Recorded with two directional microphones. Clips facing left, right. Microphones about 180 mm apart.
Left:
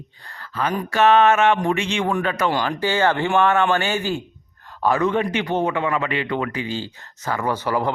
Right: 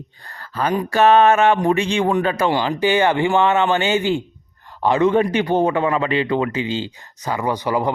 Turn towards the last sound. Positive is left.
turn(degrees=-15)  # may be behind; listen again after turning